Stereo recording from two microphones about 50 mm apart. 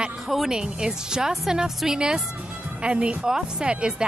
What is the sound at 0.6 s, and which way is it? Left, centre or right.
Speech, centre.